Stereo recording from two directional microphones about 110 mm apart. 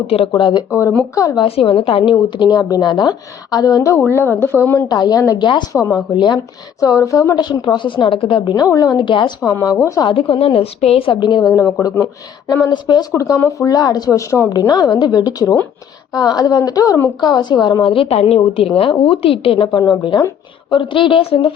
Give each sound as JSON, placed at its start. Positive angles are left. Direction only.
{"t": 0.3, "sound": "a woman's voice", "side_deg": 45}
{"t": 0.7, "sound": "a woman's voice", "side_deg": 25}
{"t": 1.5, "sound": "a woman's voice", "side_deg": 60}
{"t": 4.9, "sound": "a woman's voice", "side_deg": 35}
{"t": 6.1, "sound": "a woman's voice", "side_deg": 45}
{"t": 6.7, "sound": "a woman's voice", "side_deg": 30}
{"t": 9.4, "sound": "a woman's voice", "side_deg": 30}
{"t": 10.0, "sound": "a woman's voice", "side_deg": 50}
{"t": 11.2, "sound": "a woman's voice", "side_deg": 40}
{"t": 14.7, "sound": "a woman's voice", "side_deg": 40}
{"t": 17.9, "sound": "a woman's voice", "side_deg": 60}
{"t": 19.6, "sound": "a woman's voice", "side_deg": 35}
{"t": 20.7, "sound": "a woman's voice", "side_deg": 50}